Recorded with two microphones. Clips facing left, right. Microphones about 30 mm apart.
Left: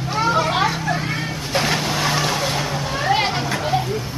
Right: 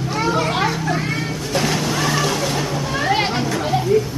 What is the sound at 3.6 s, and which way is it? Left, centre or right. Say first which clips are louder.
Goat: right 4 dB; centre.